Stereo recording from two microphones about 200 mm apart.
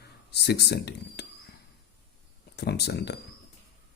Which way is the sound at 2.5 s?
55° left (ahead or behind).